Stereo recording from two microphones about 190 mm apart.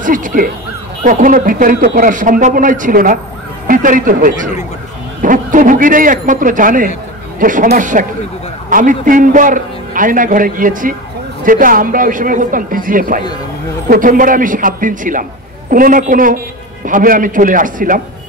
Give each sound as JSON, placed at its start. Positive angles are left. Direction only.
{"t": 0.0, "sound": "a man's voice", "side_deg": -45}